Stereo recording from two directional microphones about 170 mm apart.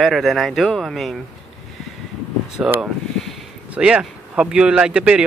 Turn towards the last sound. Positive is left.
turn(degrees=-5)  # may be behind; listen again after turning